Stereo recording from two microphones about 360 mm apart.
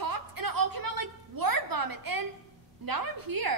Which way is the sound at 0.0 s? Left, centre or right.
Right.